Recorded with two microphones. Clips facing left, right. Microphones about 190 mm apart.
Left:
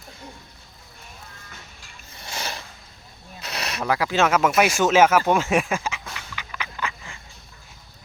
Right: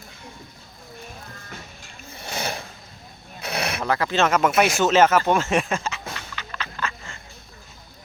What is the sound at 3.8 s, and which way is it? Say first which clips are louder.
Speech: left 1 dB; 10° left (ahead or behind).